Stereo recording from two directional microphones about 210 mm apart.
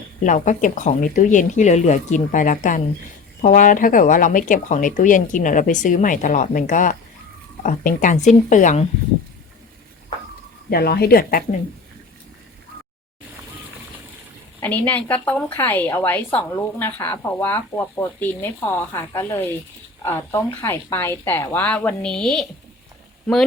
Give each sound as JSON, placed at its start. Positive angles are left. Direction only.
{"t": 0.3, "sound": "speech", "side_deg": 35}
{"t": 10.7, "sound": "speech", "side_deg": 50}
{"t": 14.6, "sound": "a woman's voice", "side_deg": 10}